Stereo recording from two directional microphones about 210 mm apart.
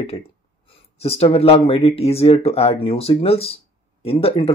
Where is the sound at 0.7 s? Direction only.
30° left (ahead or behind).